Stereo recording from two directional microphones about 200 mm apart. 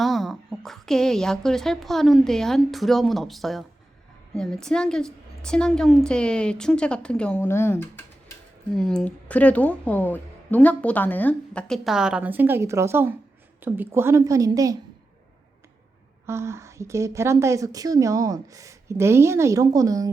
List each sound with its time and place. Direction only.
0.0 s a woman's voice: centre (ahead or behind); by 14.8 s 15° right (ahead or behind)
16.2 s a woman's voice: 15° right (ahead or behind)